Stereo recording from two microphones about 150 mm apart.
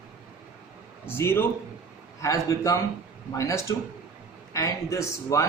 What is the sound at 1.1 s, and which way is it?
A man's voice, 15° left (ahead or behind).